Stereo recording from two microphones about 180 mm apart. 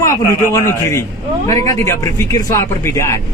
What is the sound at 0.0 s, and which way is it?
A man's voice, 15° left (ahead or behind).